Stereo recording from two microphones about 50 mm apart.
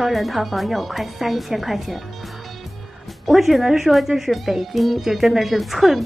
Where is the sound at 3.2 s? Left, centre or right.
Centre.